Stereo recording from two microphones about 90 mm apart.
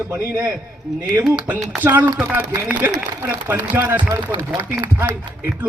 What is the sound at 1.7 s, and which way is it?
A man's voice, 20° right (ahead or behind).